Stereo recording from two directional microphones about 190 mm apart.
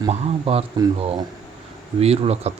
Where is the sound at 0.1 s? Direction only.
30° right (ahead or behind).